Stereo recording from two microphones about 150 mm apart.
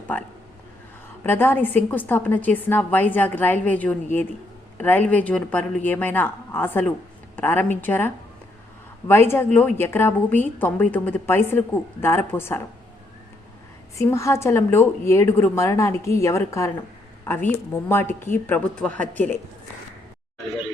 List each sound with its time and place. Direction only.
1.2 s a woman's voice: 15° left (ahead or behind)
13.9 s a woman's voice: 20° left (ahead or behind)